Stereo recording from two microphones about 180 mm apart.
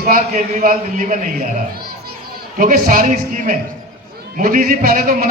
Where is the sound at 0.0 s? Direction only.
50° right (ahead or behind).